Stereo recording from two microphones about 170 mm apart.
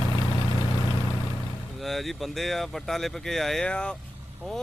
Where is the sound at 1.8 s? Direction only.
Centre (ahead or behind).